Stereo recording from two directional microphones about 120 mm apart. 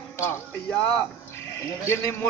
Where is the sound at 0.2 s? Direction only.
20° left (ahead or behind).